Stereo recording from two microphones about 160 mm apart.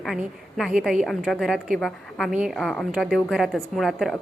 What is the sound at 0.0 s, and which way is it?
A woman's voice, centre (ahead or behind).